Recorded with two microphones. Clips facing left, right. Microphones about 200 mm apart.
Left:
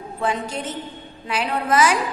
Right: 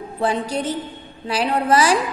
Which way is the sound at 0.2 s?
35° right (ahead or behind).